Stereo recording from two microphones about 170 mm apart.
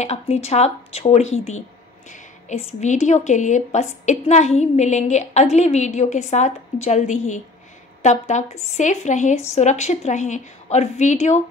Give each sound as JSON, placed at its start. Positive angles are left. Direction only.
{"t": 0.0, "sound": "a woman's voice", "side_deg": 40}